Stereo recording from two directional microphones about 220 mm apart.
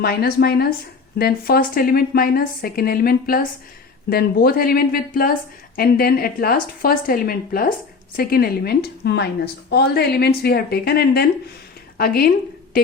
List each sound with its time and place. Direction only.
0.0 s a woman's voice: 45° left (ahead or behind)